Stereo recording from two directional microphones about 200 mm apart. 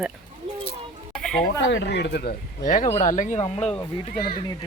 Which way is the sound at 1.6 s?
60° left (ahead or behind).